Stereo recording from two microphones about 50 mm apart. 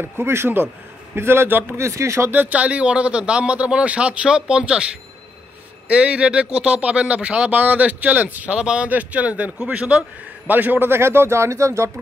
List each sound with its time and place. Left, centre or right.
0.0 s speech: right
1.8 s speech: right
2.3 s speech: right
8.5 s speech: centre
8.8 s speech: right
10.5 s a man's voice: right
10.9 s speech: right